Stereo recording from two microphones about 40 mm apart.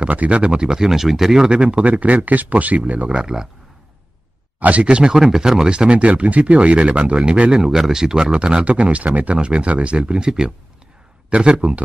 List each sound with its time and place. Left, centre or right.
0.0 s speech: right
0.8 s speech: centre; by 2.0 s right
2.0 s speech: right
3.2 s speech: centre
4.6 s speech: right
5.1 s speech: centre; by 7.5 s right
7.5 s speech: centre
8.6 s speech: right